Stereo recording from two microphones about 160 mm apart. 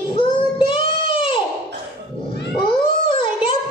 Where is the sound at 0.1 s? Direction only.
35° left (ahead or behind).